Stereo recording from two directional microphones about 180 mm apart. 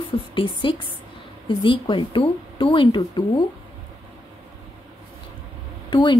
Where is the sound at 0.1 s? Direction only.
30° left (ahead or behind).